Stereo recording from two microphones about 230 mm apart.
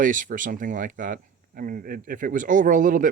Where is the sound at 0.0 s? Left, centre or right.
Right.